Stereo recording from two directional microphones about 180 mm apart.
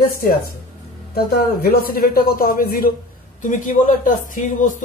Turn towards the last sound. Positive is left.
turn(degrees=45)  # may be behind; listen again after turning